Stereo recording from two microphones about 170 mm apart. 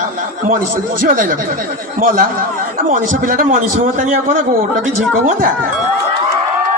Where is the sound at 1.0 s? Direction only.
55° right (ahead or behind).